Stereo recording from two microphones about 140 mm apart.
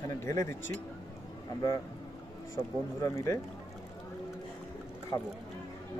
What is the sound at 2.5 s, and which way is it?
Speech, 20° left (ahead or behind).